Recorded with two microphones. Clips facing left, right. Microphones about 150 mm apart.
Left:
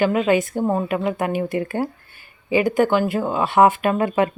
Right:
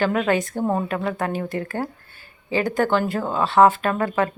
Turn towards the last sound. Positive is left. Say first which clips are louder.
# left 3 dB
turn(degrees=15)  # may be behind; listen again after turning